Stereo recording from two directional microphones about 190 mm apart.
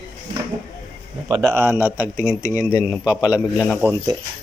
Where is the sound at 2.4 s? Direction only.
15° left (ahead or behind).